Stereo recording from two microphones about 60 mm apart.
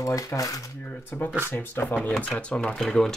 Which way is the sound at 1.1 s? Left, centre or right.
Left.